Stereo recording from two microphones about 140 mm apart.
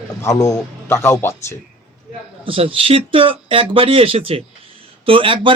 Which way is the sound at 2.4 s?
40° right (ahead or behind).